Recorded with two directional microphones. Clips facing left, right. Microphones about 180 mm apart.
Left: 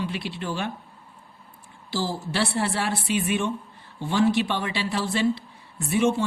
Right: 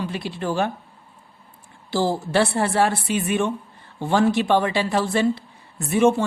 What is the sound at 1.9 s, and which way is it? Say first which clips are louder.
A woman's voice: right 7 dB; 55° right (ahead or behind).